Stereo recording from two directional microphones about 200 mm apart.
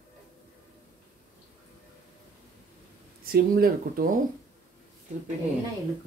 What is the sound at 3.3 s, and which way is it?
Speech, 45° right (ahead or behind).